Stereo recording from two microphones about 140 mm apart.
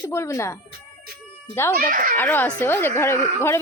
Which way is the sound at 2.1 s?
15° left (ahead or behind).